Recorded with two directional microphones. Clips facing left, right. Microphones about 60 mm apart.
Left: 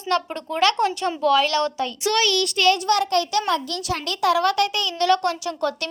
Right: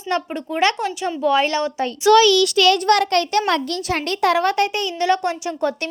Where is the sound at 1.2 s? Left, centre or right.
Right.